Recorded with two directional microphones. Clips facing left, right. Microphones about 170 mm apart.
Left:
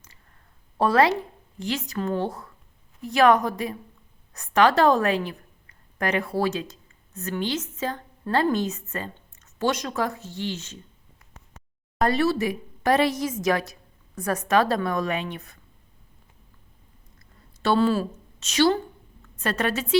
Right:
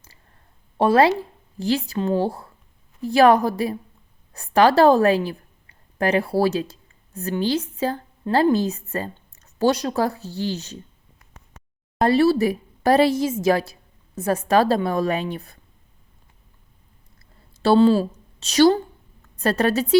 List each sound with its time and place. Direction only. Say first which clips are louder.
0.8 s a woman's voice: right 3 dB; 25° right (ahead or behind)
11.9 s a woman's voice: right 5 dB; 30° right (ahead or behind)
17.2 s a sound: right 1 dB; 30° right (ahead or behind)
19.4 s a woman's voice: right 6 dB; 35° right (ahead or behind)